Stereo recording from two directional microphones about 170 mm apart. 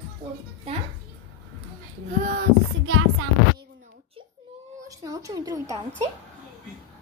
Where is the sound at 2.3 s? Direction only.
60° right (ahead or behind).